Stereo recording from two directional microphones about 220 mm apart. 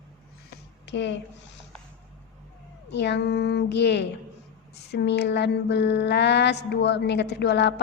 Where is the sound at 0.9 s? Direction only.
55° left (ahead or behind).